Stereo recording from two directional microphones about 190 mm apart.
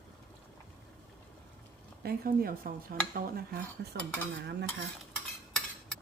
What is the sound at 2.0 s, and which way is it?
Speech, 50° right (ahead or behind).